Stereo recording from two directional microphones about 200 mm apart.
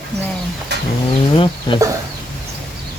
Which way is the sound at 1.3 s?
25° left (ahead or behind).